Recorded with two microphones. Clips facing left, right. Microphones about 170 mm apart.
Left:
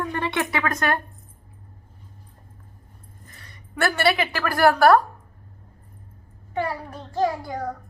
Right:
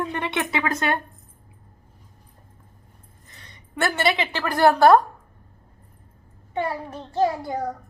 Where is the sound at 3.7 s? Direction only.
20° right (ahead or behind).